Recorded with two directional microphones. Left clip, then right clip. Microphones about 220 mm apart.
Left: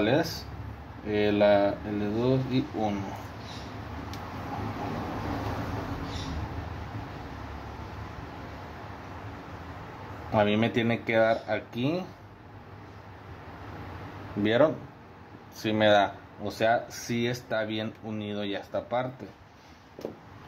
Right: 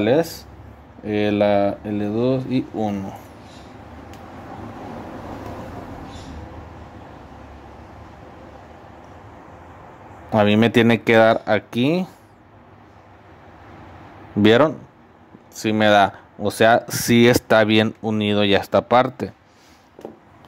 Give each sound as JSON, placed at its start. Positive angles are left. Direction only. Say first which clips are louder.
{"t": 0.0, "sound": "speech", "louder": "right 8 dB", "side_deg": -45}
{"t": 10.3, "sound": "speech", "louder": "right 9 dB", "side_deg": -50}
{"t": 14.4, "sound": "speech", "louder": "right 9 dB", "side_deg": -40}